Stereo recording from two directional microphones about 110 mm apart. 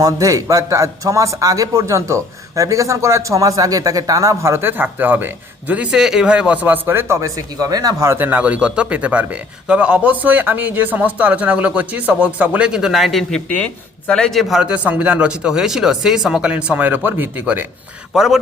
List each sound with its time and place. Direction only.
0.0 s a man's voice: 30° right (ahead or behind)
18.1 s speech: 5° right (ahead or behind)